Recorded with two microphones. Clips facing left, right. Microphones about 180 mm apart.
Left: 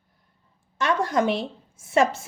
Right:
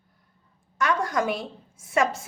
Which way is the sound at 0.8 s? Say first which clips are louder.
Left 2 dB; 25° left (ahead or behind).